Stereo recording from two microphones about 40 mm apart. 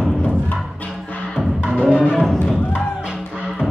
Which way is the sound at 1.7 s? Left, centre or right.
Right.